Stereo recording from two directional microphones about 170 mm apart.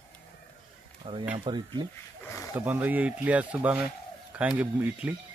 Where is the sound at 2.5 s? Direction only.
10° right (ahead or behind).